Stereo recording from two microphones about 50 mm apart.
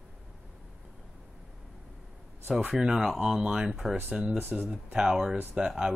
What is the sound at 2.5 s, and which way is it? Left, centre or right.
Speech, centre.